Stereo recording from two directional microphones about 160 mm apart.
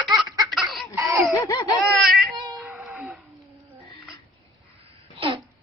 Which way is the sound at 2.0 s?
Centre (ahead or behind).